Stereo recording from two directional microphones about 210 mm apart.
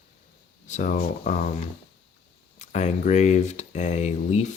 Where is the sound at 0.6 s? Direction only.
35° left (ahead or behind).